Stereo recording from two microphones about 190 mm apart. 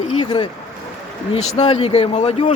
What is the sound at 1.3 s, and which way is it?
Speech, 35° left (ahead or behind).